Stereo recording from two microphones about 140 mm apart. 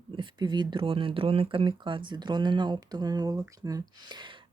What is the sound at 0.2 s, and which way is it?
Speech, 30° right (ahead or behind).